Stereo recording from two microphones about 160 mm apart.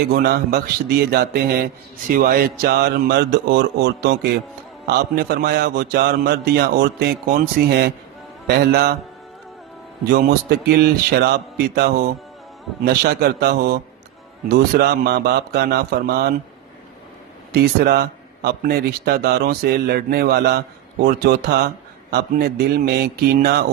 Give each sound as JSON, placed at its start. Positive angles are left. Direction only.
{"t": 0.1, "sound": "speech", "side_deg": -80}
{"t": 2.0, "sound": "speech", "side_deg": -65}
{"t": 4.9, "sound": "speech", "side_deg": -75}
{"t": 10.1, "sound": "speech", "side_deg": -80}
{"t": 12.8, "sound": "speech", "side_deg": -80}
{"t": 14.4, "sound": "speech", "side_deg": -75}
{"t": 17.5, "sound": "speech", "side_deg": -90}